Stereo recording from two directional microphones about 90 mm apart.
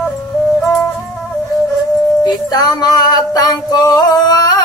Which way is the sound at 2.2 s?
50° left (ahead or behind).